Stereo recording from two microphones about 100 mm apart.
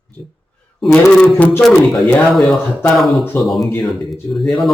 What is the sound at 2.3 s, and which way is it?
Speech, centre (ahead or behind).